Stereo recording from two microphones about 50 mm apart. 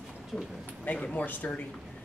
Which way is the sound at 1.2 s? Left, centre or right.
Left.